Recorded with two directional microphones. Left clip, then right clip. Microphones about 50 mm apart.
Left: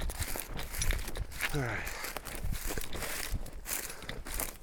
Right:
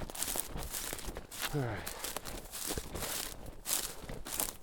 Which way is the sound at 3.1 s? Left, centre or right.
Right.